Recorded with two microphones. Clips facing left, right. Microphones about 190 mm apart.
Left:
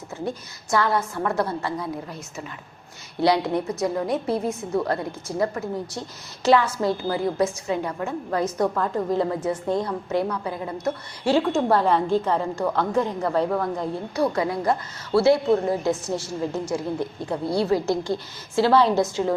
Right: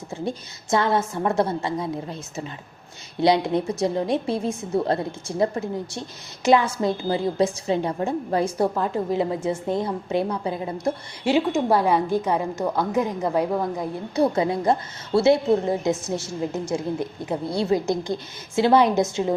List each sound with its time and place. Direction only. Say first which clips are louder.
0.3 s a woman's voice: right 2 dB; 20° right (ahead or behind)
14.2 s a woman's voice: right 3 dB; 25° right (ahead or behind)